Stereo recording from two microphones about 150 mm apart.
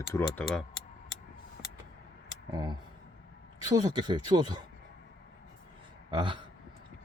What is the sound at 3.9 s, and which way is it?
Speech, 30° right (ahead or behind).